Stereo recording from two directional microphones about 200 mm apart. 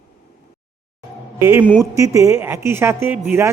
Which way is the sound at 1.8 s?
15° right (ahead or behind).